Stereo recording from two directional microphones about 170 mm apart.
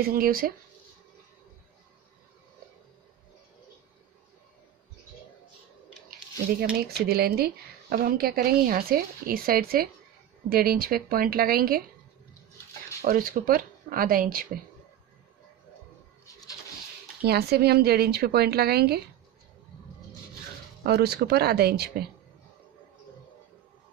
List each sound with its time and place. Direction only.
0.0 s speech: 60° right (ahead or behind)
6.0 s speech: 60° right (ahead or behind)
13.0 s speech: 60° right (ahead or behind)
17.2 s speech: 70° right (ahead or behind)
20.8 s speech: 70° right (ahead or behind)